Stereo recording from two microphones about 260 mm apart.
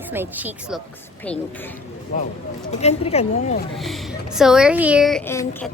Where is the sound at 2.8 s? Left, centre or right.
Left.